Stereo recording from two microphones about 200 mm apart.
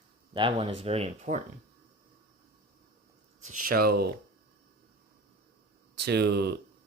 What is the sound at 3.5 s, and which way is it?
Speech, 45° right (ahead or behind).